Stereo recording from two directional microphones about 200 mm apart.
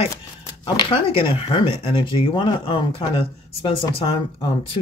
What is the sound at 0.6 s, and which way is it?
Speech, 25° left (ahead or behind).